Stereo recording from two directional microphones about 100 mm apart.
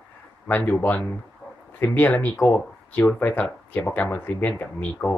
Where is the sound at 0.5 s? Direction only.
20° left (ahead or behind).